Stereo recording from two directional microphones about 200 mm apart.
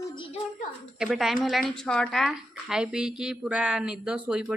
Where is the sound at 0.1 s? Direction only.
25° left (ahead or behind).